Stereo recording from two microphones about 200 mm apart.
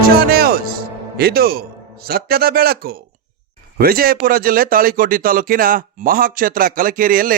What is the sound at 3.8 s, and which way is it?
Speech, 50° right (ahead or behind).